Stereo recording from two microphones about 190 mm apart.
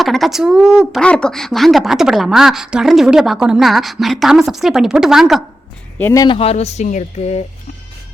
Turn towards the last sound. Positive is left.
turn(degrees=40)  # may be behind; listen again after turning